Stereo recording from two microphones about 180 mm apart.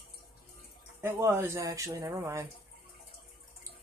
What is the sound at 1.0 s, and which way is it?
Speech, 15° right (ahead or behind).